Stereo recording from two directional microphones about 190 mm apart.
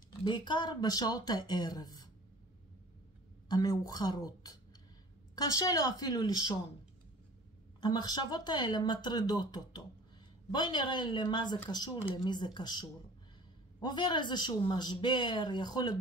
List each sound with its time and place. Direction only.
0.2 s speech: 25° left (ahead or behind)
3.4 s speech: 20° left (ahead or behind)
7.8 s speech: 20° left (ahead or behind)